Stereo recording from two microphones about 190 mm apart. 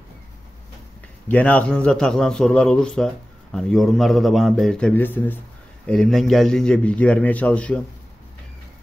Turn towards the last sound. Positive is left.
turn(degrees=5)  # may be behind; listen again after turning